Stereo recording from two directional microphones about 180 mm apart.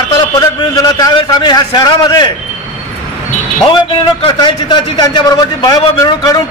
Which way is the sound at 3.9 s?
25° left (ahead or behind).